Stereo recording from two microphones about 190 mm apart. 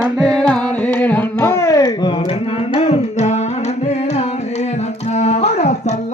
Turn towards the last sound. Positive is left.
turn(degrees=35)  # may be behind; listen again after turning